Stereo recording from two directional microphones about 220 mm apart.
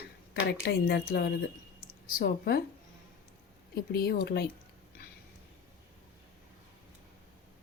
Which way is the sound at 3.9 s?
45° left (ahead or behind).